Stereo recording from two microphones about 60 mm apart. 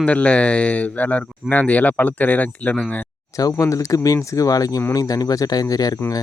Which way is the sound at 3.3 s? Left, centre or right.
Left.